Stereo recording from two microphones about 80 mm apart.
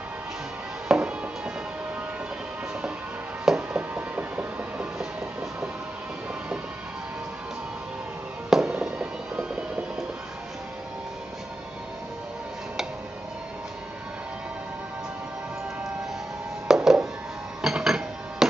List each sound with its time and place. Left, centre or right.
0.8 s music: centre
3.4 s a sound: centre
8.5 s fireworks: centre
8.7 s music: centre
16.6 s music: centre
17.6 s dishes: centre